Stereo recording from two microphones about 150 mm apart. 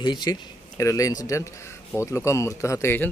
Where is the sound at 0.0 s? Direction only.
30° left (ahead or behind).